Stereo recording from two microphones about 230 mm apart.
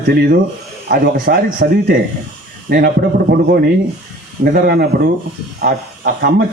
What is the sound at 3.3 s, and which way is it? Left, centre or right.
Speech, right.